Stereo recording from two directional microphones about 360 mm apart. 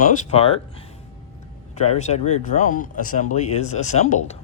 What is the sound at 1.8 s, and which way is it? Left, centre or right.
Speech, centre.